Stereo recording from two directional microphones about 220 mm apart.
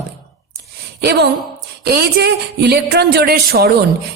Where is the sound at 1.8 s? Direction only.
45° right (ahead or behind).